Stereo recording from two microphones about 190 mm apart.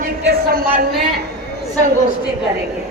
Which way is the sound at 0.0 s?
55° right (ahead or behind).